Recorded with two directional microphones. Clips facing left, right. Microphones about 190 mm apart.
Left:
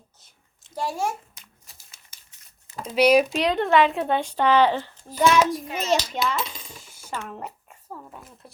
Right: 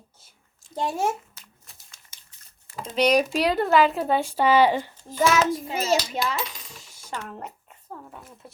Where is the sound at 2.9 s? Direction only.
5° left (ahead or behind).